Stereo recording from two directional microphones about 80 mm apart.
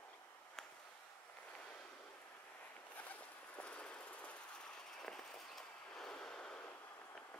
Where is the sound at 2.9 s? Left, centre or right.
Centre.